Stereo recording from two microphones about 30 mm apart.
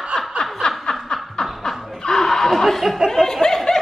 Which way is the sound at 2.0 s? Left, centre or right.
Centre.